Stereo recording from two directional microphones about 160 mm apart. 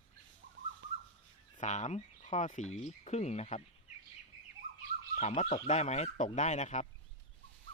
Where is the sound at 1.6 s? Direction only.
45° left (ahead or behind).